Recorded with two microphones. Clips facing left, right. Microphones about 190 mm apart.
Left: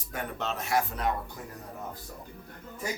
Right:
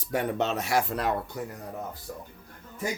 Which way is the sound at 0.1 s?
75° right (ahead or behind).